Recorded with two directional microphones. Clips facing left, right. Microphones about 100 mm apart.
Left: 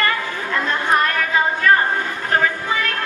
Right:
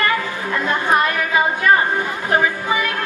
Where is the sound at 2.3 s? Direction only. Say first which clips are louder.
Right 1 dB; 10° right (ahead or behind).